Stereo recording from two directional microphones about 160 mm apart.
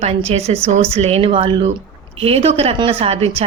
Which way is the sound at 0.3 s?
40° right (ahead or behind).